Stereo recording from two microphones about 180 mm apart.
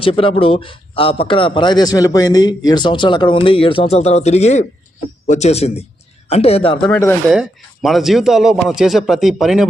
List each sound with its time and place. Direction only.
0.0 s a man's voice: 30° left (ahead or behind)
6.9 s speech: 15° left (ahead or behind)
7.3 s speech: centre (ahead or behind)